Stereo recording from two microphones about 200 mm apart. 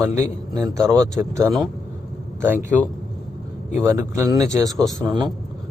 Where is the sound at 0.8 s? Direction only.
5° left (ahead or behind).